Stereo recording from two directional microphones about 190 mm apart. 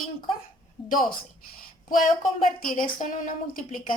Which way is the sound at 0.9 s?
45° left (ahead or behind).